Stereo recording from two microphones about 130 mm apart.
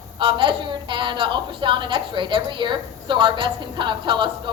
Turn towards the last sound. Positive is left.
turn(degrees=-35)  # may be behind; listen again after turning